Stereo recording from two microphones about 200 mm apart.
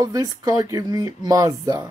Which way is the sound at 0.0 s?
15° right (ahead or behind).